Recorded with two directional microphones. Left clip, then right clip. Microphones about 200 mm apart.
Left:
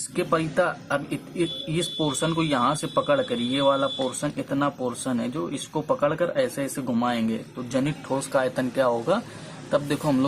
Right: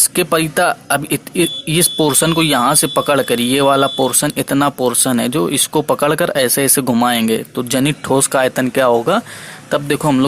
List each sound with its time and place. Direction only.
0.2 s speech: 45° right (ahead or behind)